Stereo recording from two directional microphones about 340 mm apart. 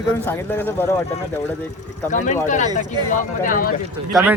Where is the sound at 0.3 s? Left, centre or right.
Centre.